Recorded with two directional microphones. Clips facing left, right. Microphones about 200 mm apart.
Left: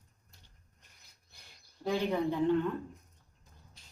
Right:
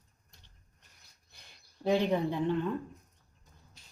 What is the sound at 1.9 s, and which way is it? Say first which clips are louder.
Speech: right 3 dB; 15° right (ahead or behind).